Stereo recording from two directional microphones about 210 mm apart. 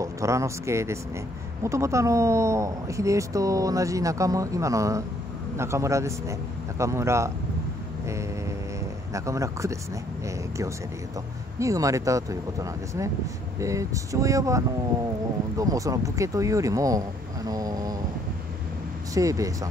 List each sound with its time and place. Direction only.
0.0 s speech: 15° right (ahead or behind)
8.0 s vehicle: 15° right (ahead or behind)
9.1 s speech: 15° right (ahead or behind)
11.6 s speech: 15° right (ahead or behind)
17.5 s a sound: 15° right (ahead or behind)
19.1 s speech: 15° right (ahead or behind)